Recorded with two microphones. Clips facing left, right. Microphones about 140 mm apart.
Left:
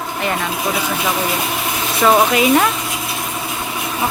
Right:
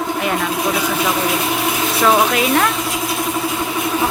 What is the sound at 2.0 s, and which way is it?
Speech, centre (ahead or behind).